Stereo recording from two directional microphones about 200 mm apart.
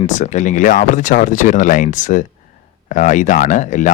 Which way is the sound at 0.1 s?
40° left (ahead or behind).